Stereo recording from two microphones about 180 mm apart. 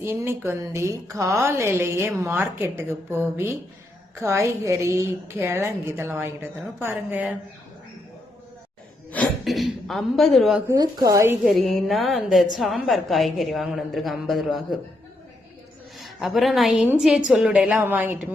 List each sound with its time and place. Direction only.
0.0 s a woman's voice: 15° right (ahead or behind)
9.1 s gasp: centre (ahead or behind)
10.7 s a woman's voice: 20° right (ahead or behind)
11.4 s a woman's voice: centre (ahead or behind)
16.0 s a woman's voice: centre (ahead or behind)